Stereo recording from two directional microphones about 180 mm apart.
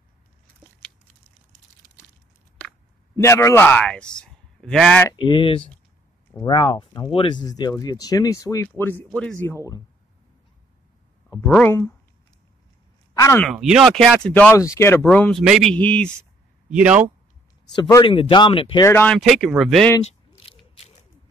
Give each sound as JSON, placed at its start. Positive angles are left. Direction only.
{"t": 3.2, "sound": "a man's voice", "side_deg": 15}
{"t": 5.1, "sound": "speech", "side_deg": 25}
{"t": 11.3, "sound": "speech", "side_deg": 5}
{"t": 13.1, "sound": "speech", "side_deg": 15}
{"t": 13.4, "sound": "speech", "side_deg": 0}
{"t": 15.0, "sound": "speech", "side_deg": 5}
{"t": 16.7, "sound": "a man's voice", "side_deg": -5}
{"t": 17.7, "sound": "speech", "side_deg": 20}
{"t": 18.9, "sound": "speech", "side_deg": 10}
{"t": 19.1, "sound": "speech", "side_deg": 0}
{"t": 20.3, "sound": "ratchet", "side_deg": 30}